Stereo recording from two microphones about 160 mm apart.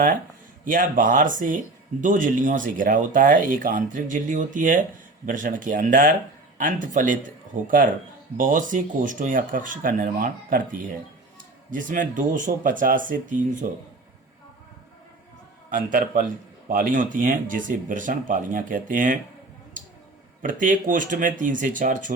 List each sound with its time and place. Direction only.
0.6 s speech: 55° right (ahead or behind)
15.7 s speech: 60° right (ahead or behind)
20.4 s speech: 55° right (ahead or behind)